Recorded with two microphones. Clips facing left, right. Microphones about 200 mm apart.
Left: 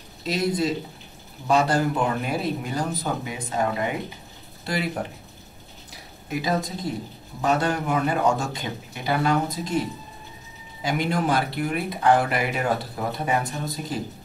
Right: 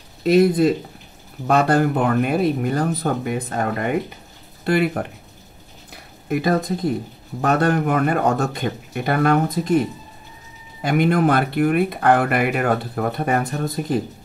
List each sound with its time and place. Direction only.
0.2 s speech: 60° right (ahead or behind)
5.9 s a sound: 55° right (ahead or behind)
7.4 s speech: 55° right (ahead or behind)